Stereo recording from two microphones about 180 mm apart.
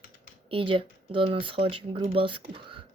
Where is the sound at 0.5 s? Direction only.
30° right (ahead or behind).